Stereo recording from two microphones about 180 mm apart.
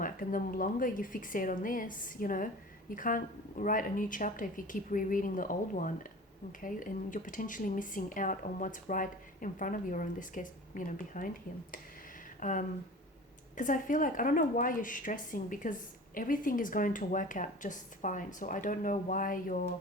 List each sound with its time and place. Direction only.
0.0 s speech: 50° left (ahead or behind)
12.4 s speech: 45° left (ahead or behind)